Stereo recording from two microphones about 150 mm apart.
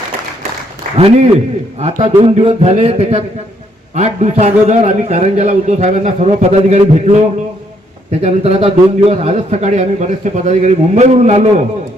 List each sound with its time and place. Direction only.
0.9 s a man's voice: 45° right (ahead or behind)